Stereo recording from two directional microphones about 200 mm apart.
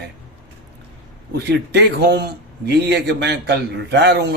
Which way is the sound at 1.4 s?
60° right (ahead or behind).